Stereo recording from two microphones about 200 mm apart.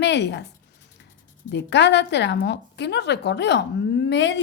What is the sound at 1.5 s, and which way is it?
A woman's voice, 60° left (ahead or behind).